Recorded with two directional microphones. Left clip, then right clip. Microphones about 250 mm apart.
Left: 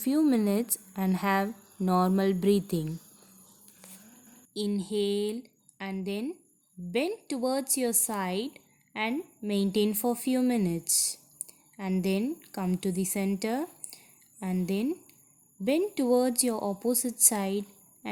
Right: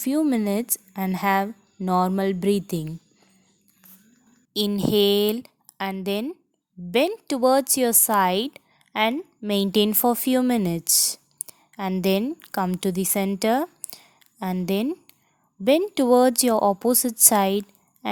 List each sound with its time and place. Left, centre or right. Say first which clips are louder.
0.0 s a woman's voice: right 3 dB; right
4.5 s a woman's voice: right 10 dB; right